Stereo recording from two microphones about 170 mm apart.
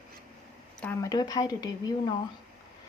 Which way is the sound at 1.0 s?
25° left (ahead or behind).